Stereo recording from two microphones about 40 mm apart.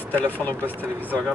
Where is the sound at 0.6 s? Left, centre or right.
Right.